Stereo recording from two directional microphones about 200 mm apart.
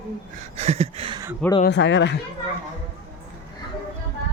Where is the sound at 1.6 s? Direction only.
60° left (ahead or behind).